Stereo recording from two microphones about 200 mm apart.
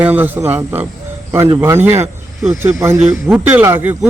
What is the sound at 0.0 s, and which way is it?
Speech, 10° right (ahead or behind).